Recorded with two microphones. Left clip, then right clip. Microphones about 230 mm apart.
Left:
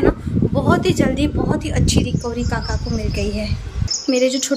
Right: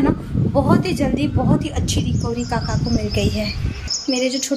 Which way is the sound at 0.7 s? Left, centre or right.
Centre.